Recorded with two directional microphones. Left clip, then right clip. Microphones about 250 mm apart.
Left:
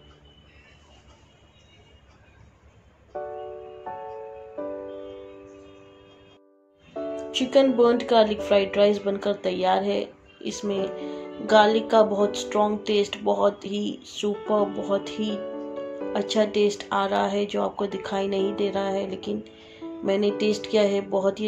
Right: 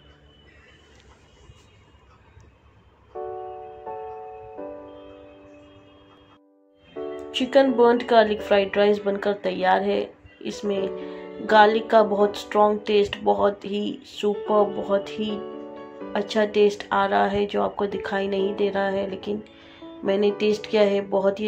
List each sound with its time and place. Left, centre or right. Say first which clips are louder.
7.3 s speech: right 1 dB; centre